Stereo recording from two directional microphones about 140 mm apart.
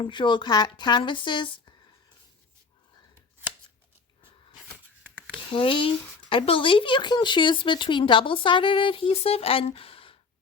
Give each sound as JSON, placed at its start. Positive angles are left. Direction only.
{"t": 0.0, "sound": "speech", "side_deg": 35}
{"t": 5.5, "sound": "speech", "side_deg": 40}
{"t": 9.7, "sound": "a sound", "side_deg": 40}